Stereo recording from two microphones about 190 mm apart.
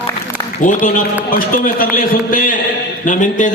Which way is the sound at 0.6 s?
45° left (ahead or behind).